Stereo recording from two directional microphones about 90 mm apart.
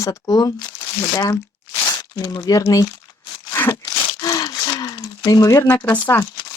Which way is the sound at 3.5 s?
30° left (ahead or behind).